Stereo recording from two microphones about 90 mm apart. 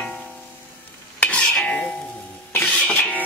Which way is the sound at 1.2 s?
15° left (ahead or behind).